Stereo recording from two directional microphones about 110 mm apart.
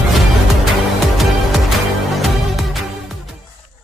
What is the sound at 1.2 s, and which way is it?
Music, centre (ahead or behind).